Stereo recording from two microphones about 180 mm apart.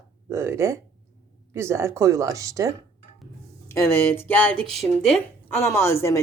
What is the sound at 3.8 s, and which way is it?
Speech, 15° left (ahead or behind).